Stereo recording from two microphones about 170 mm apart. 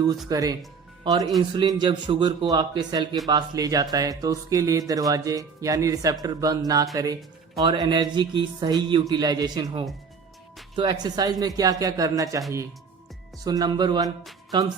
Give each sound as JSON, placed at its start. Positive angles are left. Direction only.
{"t": 0.3, "sound": "speech", "side_deg": -20}
{"t": 13.4, "sound": "speech", "side_deg": -25}